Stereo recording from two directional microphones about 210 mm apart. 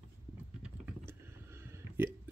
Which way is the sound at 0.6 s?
10° right (ahead or behind).